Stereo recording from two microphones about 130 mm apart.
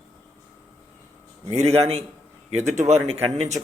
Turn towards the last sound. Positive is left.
turn(degrees=-55)  # may be behind; listen again after turning